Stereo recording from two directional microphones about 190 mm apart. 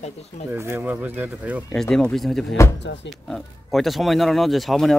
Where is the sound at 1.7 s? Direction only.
5° left (ahead or behind).